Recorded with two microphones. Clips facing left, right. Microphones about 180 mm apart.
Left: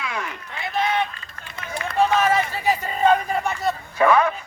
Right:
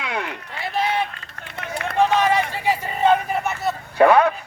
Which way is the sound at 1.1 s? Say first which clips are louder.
Right 3 dB; 65° right (ahead or behind).